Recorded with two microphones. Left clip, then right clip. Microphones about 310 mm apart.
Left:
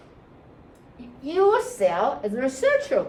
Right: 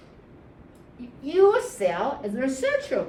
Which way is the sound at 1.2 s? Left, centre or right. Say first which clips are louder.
Right 1 dB; centre.